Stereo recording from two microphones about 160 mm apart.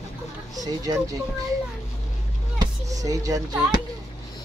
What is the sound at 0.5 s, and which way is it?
Speech, 20° right (ahead or behind).